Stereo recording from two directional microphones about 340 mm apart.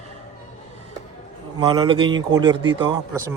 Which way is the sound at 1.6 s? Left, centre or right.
Centre.